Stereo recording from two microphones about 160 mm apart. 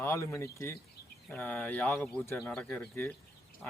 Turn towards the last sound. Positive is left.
turn(degrees=10)  # may be behind; listen again after turning